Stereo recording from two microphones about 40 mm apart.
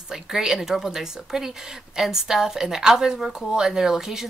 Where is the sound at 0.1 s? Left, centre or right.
Centre.